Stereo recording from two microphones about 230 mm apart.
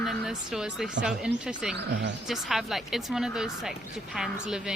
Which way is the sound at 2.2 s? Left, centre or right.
Centre.